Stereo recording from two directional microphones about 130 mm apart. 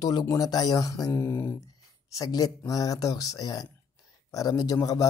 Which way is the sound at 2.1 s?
30° left (ahead or behind).